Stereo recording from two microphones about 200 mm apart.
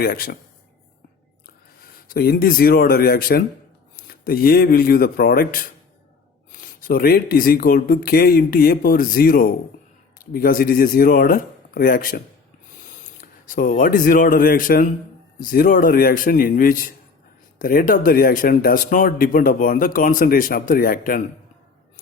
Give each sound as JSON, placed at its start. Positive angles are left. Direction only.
{"t": 0.0, "sound": "speech", "side_deg": 50}
{"t": 1.8, "sound": "speech", "side_deg": 50}
{"t": 13.2, "sound": "speech", "side_deg": 45}